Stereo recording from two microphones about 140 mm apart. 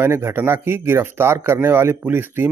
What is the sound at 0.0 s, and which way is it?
Speech, 15° right (ahead or behind).